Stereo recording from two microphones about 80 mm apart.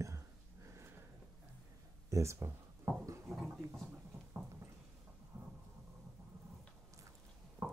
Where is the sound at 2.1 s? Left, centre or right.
Right.